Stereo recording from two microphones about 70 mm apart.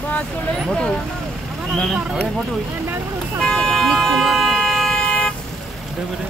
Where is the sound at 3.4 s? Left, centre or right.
Centre.